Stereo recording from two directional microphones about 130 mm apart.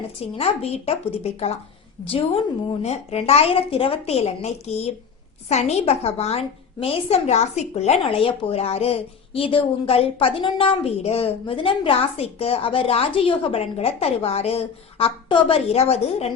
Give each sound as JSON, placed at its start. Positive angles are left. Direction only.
{"t": 0.3, "sound": "a woman's voice", "side_deg": 50}
{"t": 2.8, "sound": "a woman's voice", "side_deg": 55}